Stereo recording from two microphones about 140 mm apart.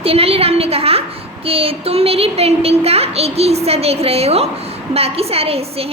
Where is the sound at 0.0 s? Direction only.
45° right (ahead or behind).